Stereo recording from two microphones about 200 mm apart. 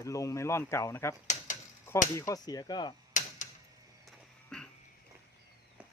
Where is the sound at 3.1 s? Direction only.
40° left (ahead or behind).